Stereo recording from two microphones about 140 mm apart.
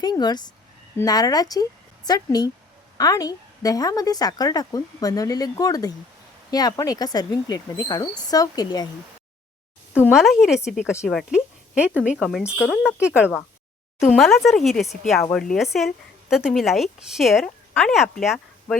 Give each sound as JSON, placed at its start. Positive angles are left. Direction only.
{"t": 0.0, "sound": "a woman's voice", "side_deg": 30}
{"t": 10.1, "sound": "a woman's voice", "side_deg": 0}